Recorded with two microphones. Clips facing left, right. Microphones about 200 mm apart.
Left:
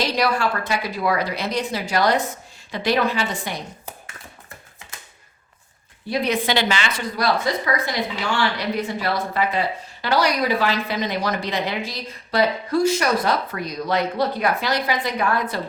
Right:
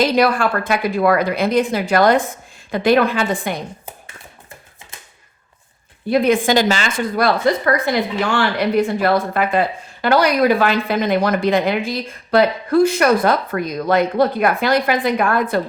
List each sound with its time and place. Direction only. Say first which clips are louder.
0.0 s a woman's voice: right 6 dB; 50° right (ahead or behind)
6.1 s a woman's voice: right 7 dB; 50° right (ahead or behind)